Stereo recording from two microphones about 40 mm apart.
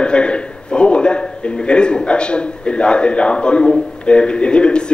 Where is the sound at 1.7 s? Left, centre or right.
Left.